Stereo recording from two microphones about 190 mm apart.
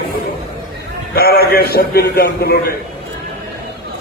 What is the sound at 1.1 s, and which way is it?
A man's voice, 55° left (ahead or behind).